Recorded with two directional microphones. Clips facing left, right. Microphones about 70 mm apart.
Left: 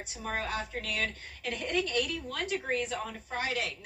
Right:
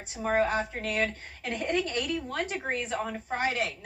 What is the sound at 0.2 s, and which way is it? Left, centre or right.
A woman's voice, right.